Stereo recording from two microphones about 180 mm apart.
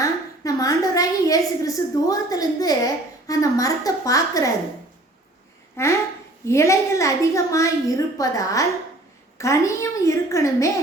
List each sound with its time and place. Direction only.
0.0 s a woman's voice: 20° left (ahead or behind)
5.7 s a sound: 15° left (ahead or behind)
6.4 s a woman's voice: 15° left (ahead or behind)